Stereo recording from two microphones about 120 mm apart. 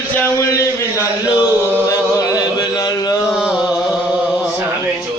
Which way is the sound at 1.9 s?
30° left (ahead or behind).